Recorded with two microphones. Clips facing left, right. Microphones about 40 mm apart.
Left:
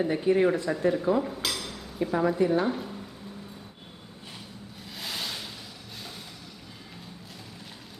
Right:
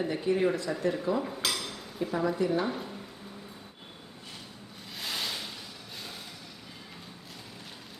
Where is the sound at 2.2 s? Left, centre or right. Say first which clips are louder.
Left 4 dB; left.